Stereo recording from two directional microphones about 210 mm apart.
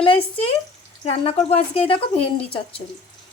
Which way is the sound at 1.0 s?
30° left (ahead or behind).